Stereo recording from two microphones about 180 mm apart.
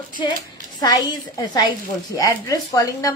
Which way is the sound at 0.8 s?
20° left (ahead or behind).